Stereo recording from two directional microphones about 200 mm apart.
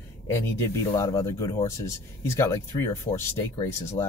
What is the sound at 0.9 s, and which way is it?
Speech, 15° left (ahead or behind).